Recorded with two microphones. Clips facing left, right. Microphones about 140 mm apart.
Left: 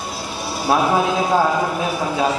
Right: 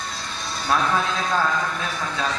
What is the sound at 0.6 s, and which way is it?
Speech, 10° left (ahead or behind).